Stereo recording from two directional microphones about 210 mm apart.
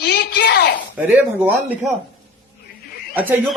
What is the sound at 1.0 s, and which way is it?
Speech, 10° right (ahead or behind).